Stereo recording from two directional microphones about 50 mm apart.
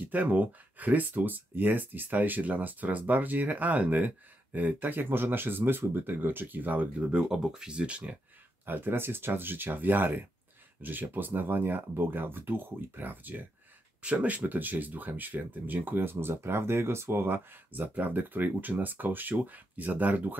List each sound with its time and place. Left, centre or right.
0.0 s speech: right
7.1 s speech: centre
8.6 s speech: right